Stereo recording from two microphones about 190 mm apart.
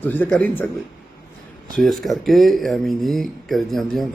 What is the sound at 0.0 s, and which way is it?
Speech, 10° left (ahead or behind).